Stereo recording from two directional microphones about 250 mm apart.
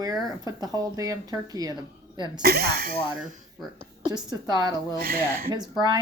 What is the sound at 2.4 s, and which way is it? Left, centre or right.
Speech, right.